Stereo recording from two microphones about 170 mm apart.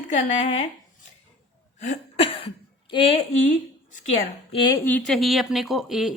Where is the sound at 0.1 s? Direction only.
45° left (ahead or behind).